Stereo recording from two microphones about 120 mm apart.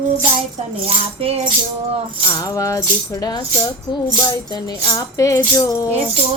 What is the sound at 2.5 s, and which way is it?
Speech, 25° left (ahead or behind).